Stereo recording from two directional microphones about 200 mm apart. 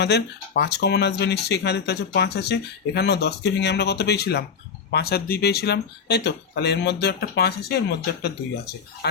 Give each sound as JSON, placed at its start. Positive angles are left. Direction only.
{"t": 0.0, "sound": "speech", "side_deg": 55}